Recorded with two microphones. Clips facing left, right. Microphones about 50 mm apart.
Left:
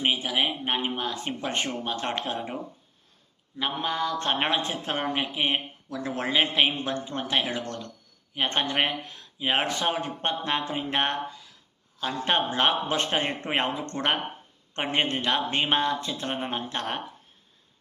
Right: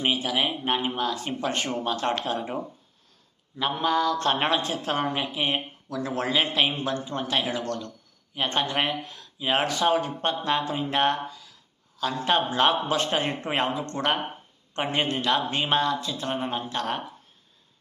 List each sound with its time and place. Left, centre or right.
0.0 s speech: centre
3.6 s a man's voice: centre; by 16.3 s left
16.3 s speech: left